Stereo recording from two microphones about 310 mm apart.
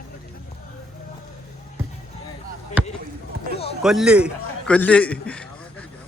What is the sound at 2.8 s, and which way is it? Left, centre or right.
Basketball bounce, centre.